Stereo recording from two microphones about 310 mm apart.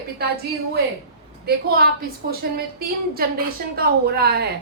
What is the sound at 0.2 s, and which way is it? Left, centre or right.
Speech, right.